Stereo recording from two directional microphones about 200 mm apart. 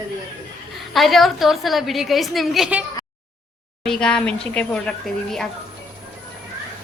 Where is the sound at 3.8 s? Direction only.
5° left (ahead or behind).